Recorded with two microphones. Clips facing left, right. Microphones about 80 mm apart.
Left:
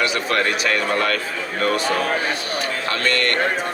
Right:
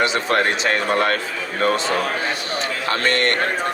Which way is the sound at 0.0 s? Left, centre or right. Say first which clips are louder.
Right 2 dB; right.